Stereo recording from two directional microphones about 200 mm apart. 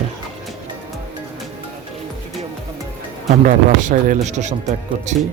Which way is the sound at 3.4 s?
40° right (ahead or behind).